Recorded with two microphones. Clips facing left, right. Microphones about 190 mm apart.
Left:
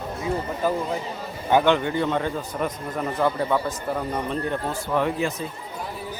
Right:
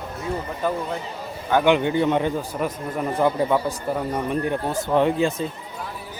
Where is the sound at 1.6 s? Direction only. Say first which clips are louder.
Right 3 dB; 15° right (ahead or behind).